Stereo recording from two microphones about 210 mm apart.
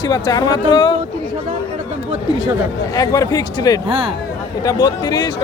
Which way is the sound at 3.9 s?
25° right (ahead or behind).